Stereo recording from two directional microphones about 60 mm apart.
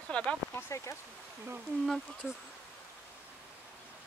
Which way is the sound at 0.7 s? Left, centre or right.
Left.